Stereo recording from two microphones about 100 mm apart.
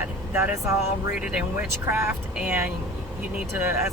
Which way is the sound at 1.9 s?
20° right (ahead or behind).